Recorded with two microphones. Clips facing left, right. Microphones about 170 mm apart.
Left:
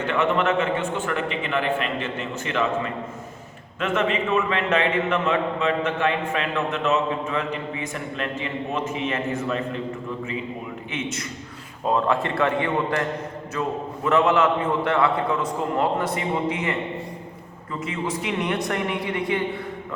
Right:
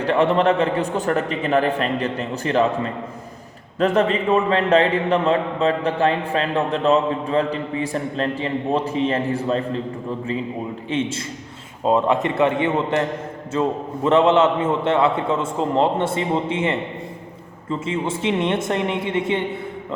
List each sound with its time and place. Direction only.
0.0 s a man's voice: 35° right (ahead or behind)
10.9 s a man's voice: 30° right (ahead or behind)
11.9 s a man's voice: 20° right (ahead or behind)